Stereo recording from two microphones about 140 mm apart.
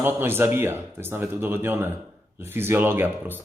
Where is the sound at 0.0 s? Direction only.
15° right (ahead or behind).